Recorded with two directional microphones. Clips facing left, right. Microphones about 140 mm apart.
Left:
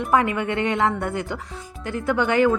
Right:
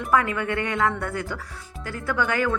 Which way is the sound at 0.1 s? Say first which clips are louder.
Left 2 dB; 20° left (ahead or behind).